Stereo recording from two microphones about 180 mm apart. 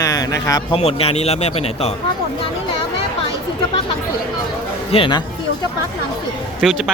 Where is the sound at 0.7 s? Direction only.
35° left (ahead or behind).